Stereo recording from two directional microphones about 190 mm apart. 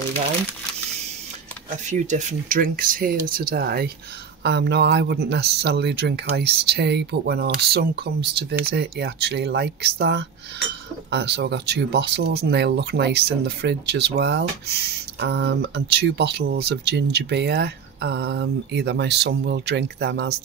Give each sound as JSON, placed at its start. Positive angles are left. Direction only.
{"t": 1.9, "sound": "speech", "side_deg": -40}